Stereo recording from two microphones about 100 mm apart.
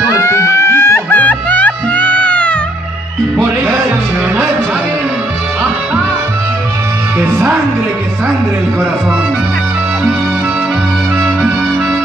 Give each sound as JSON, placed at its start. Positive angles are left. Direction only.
{"t": 0.1, "sound": "music", "side_deg": 30}